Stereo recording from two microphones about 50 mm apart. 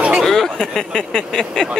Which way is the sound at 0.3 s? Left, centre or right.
Centre.